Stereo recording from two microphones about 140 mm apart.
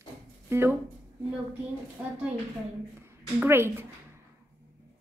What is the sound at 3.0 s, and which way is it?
Speech, 20° right (ahead or behind).